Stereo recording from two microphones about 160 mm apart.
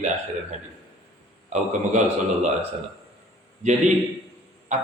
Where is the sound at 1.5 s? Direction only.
45° right (ahead or behind).